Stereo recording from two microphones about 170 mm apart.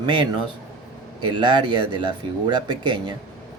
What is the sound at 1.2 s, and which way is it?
Speech, 30° right (ahead or behind).